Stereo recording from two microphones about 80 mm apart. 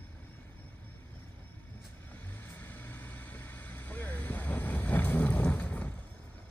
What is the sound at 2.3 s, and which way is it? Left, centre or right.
Vehicle, left.